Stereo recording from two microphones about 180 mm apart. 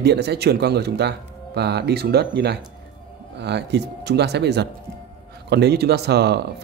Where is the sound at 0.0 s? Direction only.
65° right (ahead or behind).